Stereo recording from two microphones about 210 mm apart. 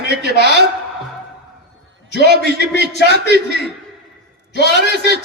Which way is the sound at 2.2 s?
50° right (ahead or behind).